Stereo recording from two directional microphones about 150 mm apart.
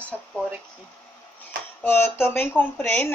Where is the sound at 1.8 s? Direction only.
15° left (ahead or behind).